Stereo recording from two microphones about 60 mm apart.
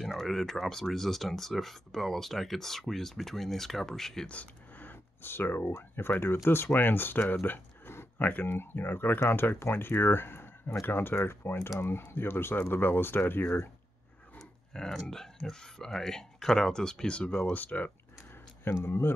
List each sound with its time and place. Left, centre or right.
0.0 s speech: centre
4.3 s a sound: left
5.9 s speech: left
8.2 s speech: left
14.7 s speech: centre; by 17.9 s left
18.9 s speech: left